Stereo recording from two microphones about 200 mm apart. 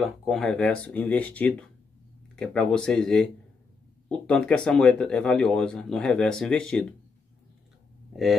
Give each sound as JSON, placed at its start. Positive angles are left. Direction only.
{"t": 0.0, "sound": "speech", "side_deg": 0}